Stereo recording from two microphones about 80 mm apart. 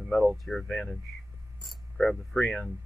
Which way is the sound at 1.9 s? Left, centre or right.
Centre.